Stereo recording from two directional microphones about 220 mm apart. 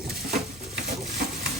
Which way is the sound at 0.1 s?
45° right (ahead or behind).